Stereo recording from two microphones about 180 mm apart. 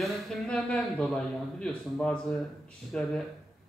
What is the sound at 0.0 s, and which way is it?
A man's voice, centre (ahead or behind).